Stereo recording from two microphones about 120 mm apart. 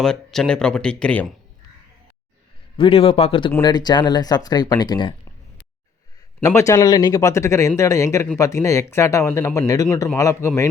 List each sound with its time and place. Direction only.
0.0 s speech: 5° left (ahead or behind)
2.7 s speech: 50° left (ahead or behind)
3.6 s speech: 35° left (ahead or behind)
6.4 s speech: 25° left (ahead or behind)